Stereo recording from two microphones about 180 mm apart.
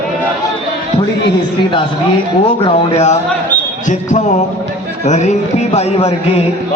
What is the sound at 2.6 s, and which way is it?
Speech, 40° left (ahead or behind).